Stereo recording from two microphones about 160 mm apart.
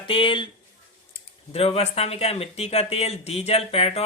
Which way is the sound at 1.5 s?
40° left (ahead or behind).